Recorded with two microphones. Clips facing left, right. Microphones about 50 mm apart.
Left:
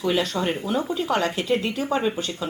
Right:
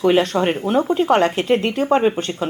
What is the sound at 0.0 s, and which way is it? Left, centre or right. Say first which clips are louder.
A woman's voice: right 7 dB; right.